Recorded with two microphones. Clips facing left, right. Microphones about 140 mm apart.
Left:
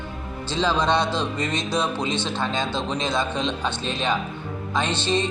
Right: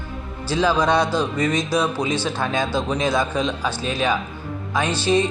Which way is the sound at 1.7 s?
10° right (ahead or behind).